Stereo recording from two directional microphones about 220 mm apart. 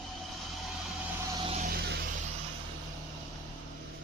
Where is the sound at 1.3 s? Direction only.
25° right (ahead or behind).